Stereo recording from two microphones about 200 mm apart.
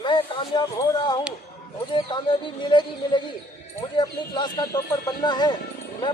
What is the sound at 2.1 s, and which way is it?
Speech, 25° left (ahead or behind).